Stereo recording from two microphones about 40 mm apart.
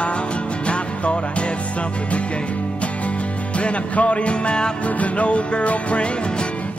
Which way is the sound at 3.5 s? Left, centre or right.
Left.